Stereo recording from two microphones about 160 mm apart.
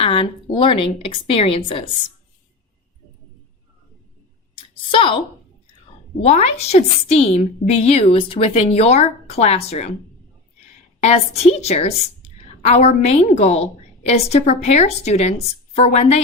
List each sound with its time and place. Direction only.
0.0 s a woman's voice: 35° left (ahead or behind)
4.5 s a sound: 30° left (ahead or behind)
6.2 s a woman's voice: 40° left (ahead or behind)
11.0 s a woman's voice: 40° left (ahead or behind)